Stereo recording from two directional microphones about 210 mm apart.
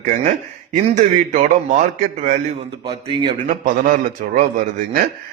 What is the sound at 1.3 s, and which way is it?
A man's voice, 35° right (ahead or behind).